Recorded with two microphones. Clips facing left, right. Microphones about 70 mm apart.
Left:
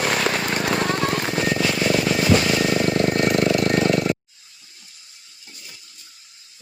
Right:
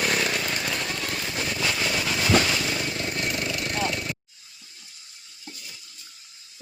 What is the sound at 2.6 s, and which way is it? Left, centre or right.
Vehicle, left.